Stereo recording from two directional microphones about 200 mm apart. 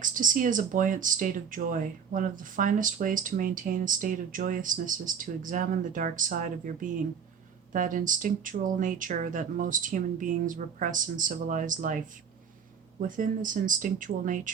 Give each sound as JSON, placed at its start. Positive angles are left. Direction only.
{"t": 0.0, "sound": "speech", "side_deg": -40}
{"t": 13.0, "sound": "speech", "side_deg": -40}